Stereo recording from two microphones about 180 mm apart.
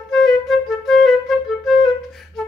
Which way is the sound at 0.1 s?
Centre (ahead or behind).